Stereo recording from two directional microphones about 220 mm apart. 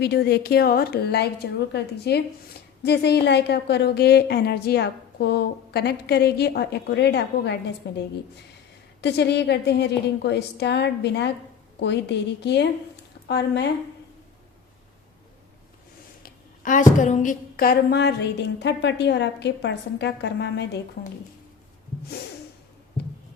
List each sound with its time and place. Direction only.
0.0 s a woman's voice: 50° left (ahead or behind)
16.2 s a woman's voice: 35° left (ahead or behind); by 20.7 s 55° left (ahead or behind)